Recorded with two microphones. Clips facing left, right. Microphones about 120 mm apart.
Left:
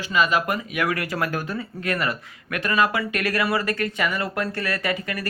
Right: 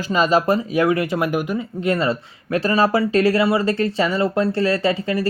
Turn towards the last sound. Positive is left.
turn(degrees=-25)  # may be behind; listen again after turning